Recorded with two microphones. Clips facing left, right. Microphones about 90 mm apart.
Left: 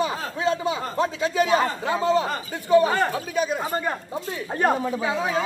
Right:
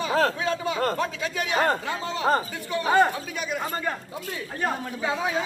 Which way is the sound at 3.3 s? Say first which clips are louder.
Left 5 dB; 35° left (ahead or behind).